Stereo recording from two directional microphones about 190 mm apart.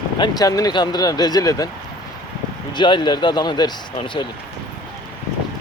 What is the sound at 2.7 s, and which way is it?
Speech, 25° left (ahead or behind).